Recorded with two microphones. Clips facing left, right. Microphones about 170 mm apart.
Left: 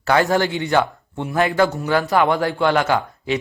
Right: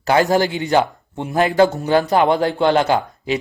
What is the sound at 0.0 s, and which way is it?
A man's voice, 15° right (ahead or behind).